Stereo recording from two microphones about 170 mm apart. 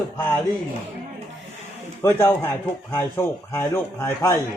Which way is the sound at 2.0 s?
15° left (ahead or behind).